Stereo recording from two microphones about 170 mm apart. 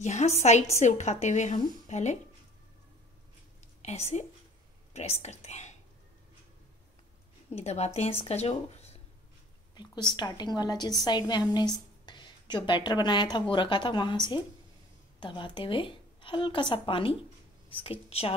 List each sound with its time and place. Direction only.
0.0 s speech: 40° left (ahead or behind)
3.8 s speech: 40° left (ahead or behind)
7.5 s speech: 40° left (ahead or behind)
10.1 s a woman's voice: 25° left (ahead or behind)